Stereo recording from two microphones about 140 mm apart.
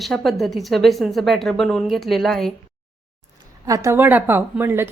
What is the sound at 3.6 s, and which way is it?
A woman's voice, 20° right (ahead or behind).